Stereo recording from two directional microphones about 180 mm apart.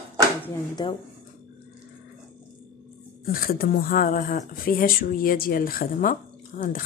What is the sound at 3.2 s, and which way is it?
Speech, 55° left (ahead or behind).